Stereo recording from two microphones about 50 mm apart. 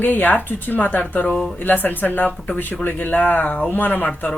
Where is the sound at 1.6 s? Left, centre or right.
Left.